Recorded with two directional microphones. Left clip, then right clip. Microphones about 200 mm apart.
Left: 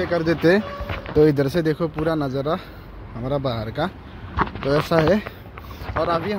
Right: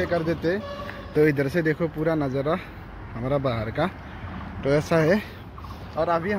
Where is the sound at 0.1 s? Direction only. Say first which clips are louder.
Left 6 dB; 45° left (ahead or behind).